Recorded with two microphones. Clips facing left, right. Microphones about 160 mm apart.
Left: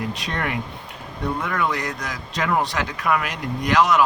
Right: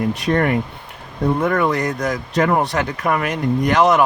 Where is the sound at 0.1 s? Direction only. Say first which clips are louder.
Right 9 dB; 50° right (ahead or behind).